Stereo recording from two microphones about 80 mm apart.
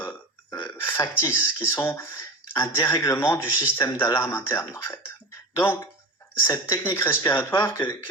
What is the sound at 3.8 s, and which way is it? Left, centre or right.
Speech, left.